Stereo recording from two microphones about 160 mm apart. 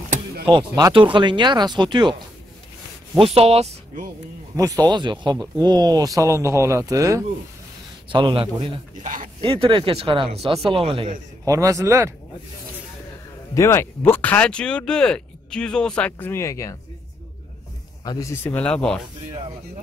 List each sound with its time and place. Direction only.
0.5 s speech: 25° right (ahead or behind)
3.2 s speech: 40° right (ahead or behind)
4.6 s speech: 20° right (ahead or behind)
8.1 s speech: 30° right (ahead or behind)
9.0 s a sound: 55° right (ahead or behind)
9.4 s speech: 35° right (ahead or behind)
11.4 s speech: 20° right (ahead or behind)
13.6 s speech: 15° left (ahead or behind)
18.0 s speech: 20° left (ahead or behind)